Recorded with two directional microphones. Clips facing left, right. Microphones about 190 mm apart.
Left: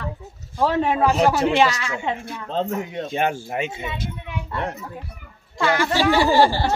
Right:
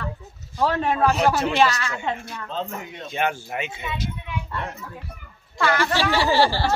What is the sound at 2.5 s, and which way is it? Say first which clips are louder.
Speech: left 7 dB; 40° left (ahead or behind).